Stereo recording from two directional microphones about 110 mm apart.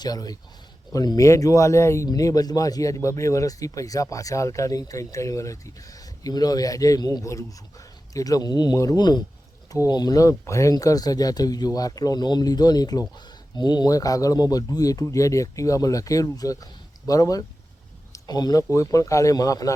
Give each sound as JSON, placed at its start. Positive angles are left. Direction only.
{"t": 0.0, "sound": "speech", "side_deg": 35}